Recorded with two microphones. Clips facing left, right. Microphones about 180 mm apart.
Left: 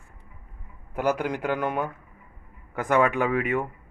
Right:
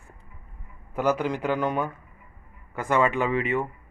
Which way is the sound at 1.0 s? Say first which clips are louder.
Right 1 dB; 10° left (ahead or behind).